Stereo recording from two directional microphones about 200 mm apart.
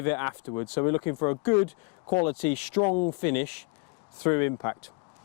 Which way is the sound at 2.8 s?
30° left (ahead or behind).